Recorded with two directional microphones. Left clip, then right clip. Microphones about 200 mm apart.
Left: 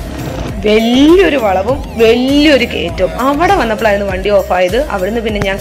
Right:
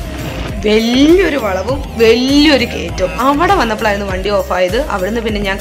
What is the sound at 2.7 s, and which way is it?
Speech, 15° left (ahead or behind).